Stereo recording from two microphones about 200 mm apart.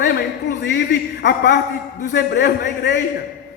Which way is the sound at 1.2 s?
60° left (ahead or behind).